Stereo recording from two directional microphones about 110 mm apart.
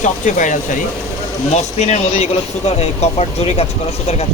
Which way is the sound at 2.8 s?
70° left (ahead or behind).